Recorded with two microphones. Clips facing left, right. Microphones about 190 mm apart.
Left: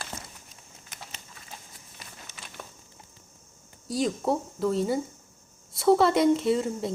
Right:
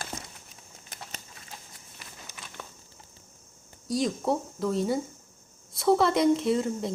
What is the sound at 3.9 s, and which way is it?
Speech, centre (ahead or behind).